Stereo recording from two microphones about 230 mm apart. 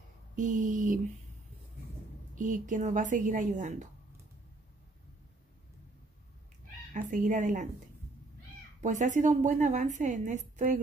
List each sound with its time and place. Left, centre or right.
0.4 s a woman's voice: right
2.3 s a woman's voice: right
6.9 s a woman's voice: right
8.8 s a woman's voice: right